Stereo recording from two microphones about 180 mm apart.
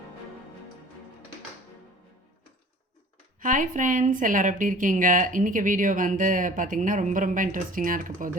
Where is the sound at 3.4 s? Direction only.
45° right (ahead or behind).